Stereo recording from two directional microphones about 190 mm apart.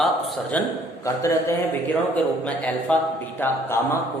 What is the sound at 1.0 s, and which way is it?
Speech, 15° left (ahead or behind).